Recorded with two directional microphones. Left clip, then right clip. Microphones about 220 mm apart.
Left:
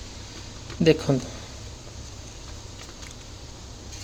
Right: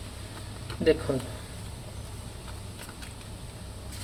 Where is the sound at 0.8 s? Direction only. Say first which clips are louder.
Left 4 dB; 35° left (ahead or behind).